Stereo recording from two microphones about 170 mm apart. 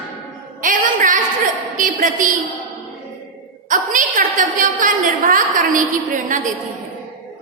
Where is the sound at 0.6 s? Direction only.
50° right (ahead or behind).